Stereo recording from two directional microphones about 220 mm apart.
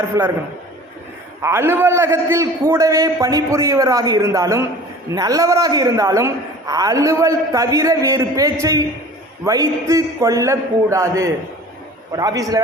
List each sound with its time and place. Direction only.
0.1 s a man's voice: 15° right (ahead or behind)
1.4 s a man's voice: 10° right (ahead or behind)